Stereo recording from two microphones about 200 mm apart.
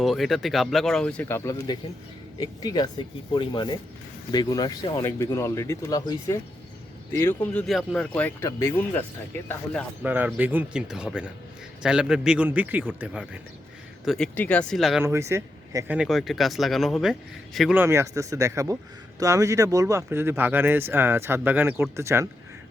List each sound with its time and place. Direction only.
0.0 s speech: centre (ahead or behind)
7.7 s speech: centre (ahead or behind)
10.0 s speech: 10° right (ahead or behind)
15.0 s speech: 15° right (ahead or behind)
17.8 s speech: 15° right (ahead or behind)